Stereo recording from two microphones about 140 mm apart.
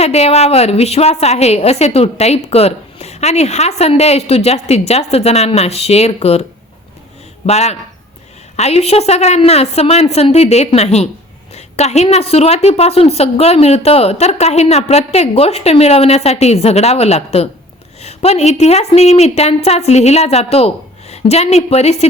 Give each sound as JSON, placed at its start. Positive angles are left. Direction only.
{"t": 0.0, "sound": "a woman's voice", "side_deg": 50}
{"t": 7.4, "sound": "a woman's voice", "side_deg": 50}